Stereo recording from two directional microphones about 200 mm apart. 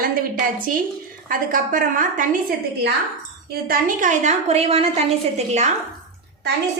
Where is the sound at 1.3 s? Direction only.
45° right (ahead or behind).